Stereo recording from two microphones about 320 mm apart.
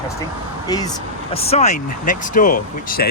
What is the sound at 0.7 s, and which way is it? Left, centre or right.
Speech, centre.